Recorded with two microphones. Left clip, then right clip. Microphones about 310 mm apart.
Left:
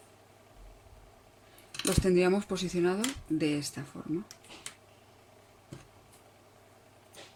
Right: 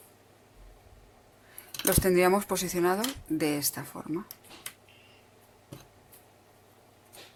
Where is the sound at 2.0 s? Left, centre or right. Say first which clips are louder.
Right 3 dB; right.